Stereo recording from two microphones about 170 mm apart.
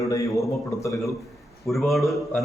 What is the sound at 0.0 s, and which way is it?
Speech, 20° left (ahead or behind).